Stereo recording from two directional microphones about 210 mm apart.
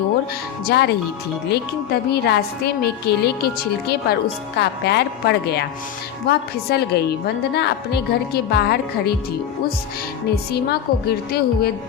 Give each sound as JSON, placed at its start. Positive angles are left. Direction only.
{"t": 0.7, "sound": "speech", "side_deg": 50}
{"t": 10.5, "sound": "speech", "side_deg": 50}